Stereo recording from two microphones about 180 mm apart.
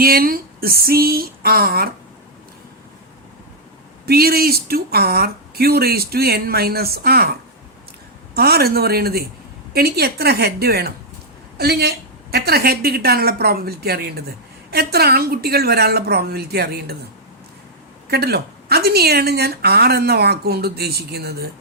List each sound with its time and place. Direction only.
0.0 s a woman's voice: 55° right (ahead or behind)
4.0 s a woman's voice: 60° right (ahead or behind)
8.4 s a woman's voice: 60° right (ahead or behind)
18.1 s a woman's voice: 65° right (ahead or behind)